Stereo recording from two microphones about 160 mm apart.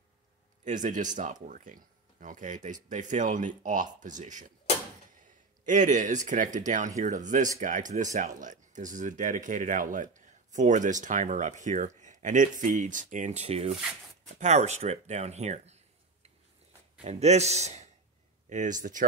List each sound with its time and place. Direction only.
0.7 s speech: 50° right (ahead or behind)
5.7 s speech: 50° right (ahead or behind)